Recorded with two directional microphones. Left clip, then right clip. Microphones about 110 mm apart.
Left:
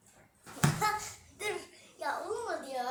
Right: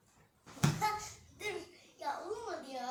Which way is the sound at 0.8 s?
15° left (ahead or behind).